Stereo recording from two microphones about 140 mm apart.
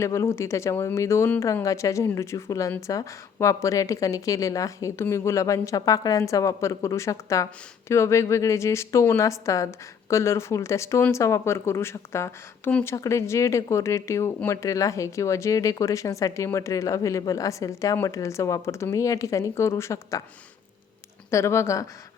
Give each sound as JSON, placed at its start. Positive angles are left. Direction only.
{"t": 0.0, "sound": "speech", "side_deg": 20}
{"t": 21.2, "sound": "speech", "side_deg": 20}